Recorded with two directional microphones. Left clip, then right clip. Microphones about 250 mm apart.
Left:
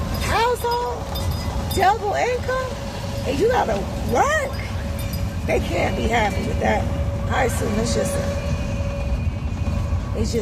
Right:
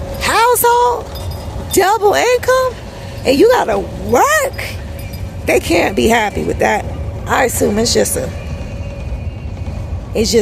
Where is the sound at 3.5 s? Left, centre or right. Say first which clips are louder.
Right 7 dB; right.